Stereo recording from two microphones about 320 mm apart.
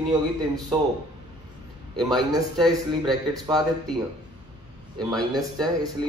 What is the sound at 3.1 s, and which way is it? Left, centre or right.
Speech, centre.